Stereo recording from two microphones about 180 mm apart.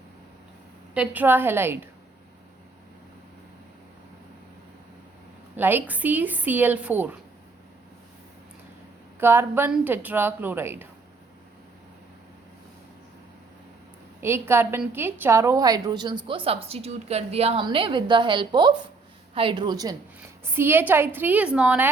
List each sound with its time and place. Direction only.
0.9 s speech: 10° right (ahead or behind)
5.5 s speech: 10° right (ahead or behind)
9.2 s speech: 10° right (ahead or behind)
14.2 s a woman's voice: 15° right (ahead or behind)